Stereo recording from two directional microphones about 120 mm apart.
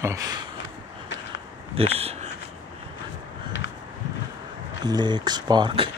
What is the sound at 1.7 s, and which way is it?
Speech, 55° right (ahead or behind).